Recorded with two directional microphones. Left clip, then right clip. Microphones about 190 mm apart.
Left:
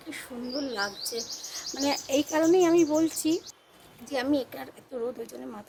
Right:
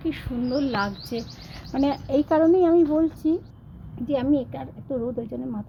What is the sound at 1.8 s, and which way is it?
Speech, 10° left (ahead or behind).